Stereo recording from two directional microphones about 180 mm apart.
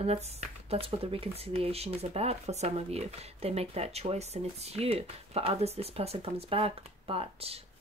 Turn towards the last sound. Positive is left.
turn(degrees=-30)  # may be behind; listen again after turning